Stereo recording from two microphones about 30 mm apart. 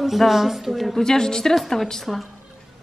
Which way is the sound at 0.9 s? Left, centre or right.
Centre.